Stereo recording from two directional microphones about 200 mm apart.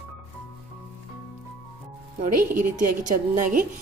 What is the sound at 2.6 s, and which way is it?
A woman's voice, 40° right (ahead or behind).